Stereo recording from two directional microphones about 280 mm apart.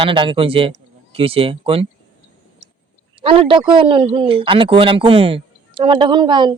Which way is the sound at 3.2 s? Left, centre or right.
Centre.